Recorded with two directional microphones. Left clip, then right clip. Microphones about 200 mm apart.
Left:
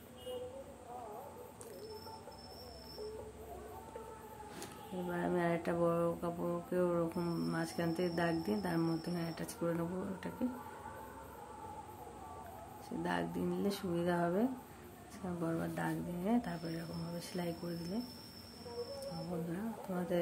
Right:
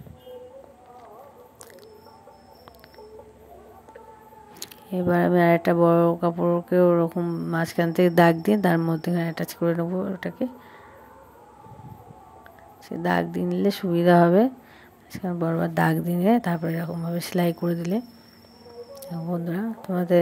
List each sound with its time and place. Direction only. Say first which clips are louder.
5.1 s a woman's voice: right 17 dB; 45° right (ahead or behind); by 7.5 s 30° right (ahead or behind)
7.5 s a woman's voice: right 18 dB; 45° right (ahead or behind)
12.8 s a woman's voice: right 14 dB; 40° right (ahead or behind)
19.5 s a woman's voice: right 13 dB; 45° right (ahead or behind)